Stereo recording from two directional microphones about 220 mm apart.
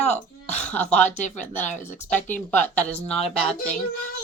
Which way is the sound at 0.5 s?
5° left (ahead or behind).